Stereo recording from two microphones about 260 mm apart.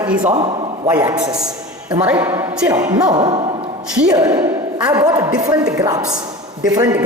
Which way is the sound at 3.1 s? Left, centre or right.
Centre.